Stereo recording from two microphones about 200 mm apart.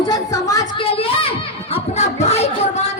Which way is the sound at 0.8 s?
30° left (ahead or behind).